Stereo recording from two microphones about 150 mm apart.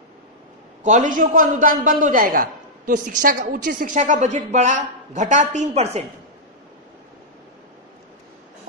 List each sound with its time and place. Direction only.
0.8 s a man's voice: 55° right (ahead or behind)